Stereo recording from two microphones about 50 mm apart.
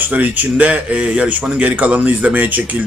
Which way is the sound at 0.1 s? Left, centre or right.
Right.